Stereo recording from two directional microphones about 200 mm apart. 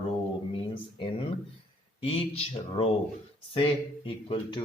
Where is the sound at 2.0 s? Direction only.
30° left (ahead or behind).